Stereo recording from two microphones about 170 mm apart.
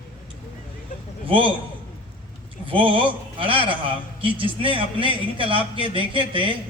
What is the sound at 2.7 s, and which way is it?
Speech, 30° right (ahead or behind).